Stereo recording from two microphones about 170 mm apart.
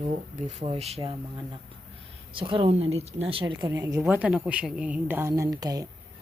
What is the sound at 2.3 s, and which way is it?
Speech, 30° right (ahead or behind).